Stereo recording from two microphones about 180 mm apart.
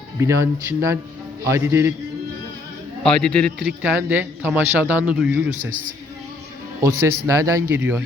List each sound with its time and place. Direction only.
0.2 s a man's voice: 15° right (ahead or behind)
3.0 s a man's voice: 5° left (ahead or behind)
6.8 s a man's voice: 15° right (ahead or behind)